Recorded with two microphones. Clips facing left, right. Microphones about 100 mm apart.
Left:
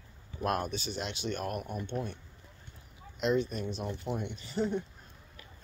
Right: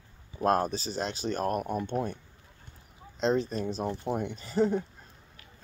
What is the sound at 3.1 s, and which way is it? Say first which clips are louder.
Speech: right 2 dB; 35° right (ahead or behind).